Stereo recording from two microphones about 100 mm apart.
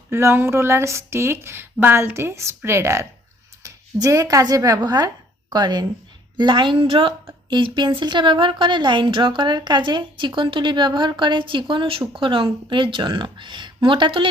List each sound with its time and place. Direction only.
0.1 s a woman's voice: 25° right (ahead or behind); by 7.1 s 60° right (ahead or behind)
7.5 s a woman's voice: 50° right (ahead or behind)